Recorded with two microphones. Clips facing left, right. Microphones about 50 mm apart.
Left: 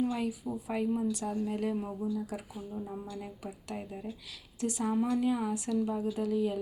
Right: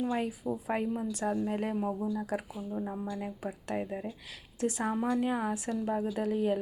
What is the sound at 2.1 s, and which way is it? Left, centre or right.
Speech, right.